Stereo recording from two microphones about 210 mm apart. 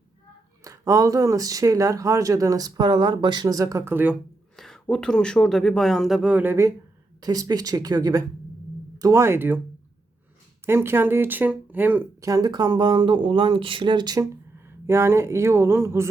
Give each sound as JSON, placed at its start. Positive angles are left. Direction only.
{"t": 0.6, "sound": "speech", "side_deg": -15}
{"t": 10.7, "sound": "speech", "side_deg": -10}